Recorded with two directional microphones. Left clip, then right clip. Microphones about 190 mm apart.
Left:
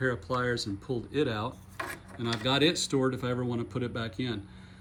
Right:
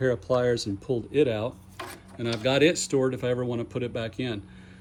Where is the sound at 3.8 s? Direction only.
10° left (ahead or behind).